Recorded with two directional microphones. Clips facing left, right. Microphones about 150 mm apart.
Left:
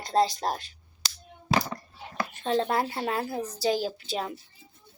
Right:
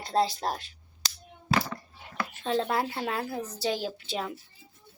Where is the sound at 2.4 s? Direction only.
Centre (ahead or behind).